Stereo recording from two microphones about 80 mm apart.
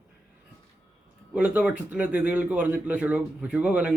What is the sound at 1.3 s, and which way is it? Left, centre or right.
A man's voice, centre.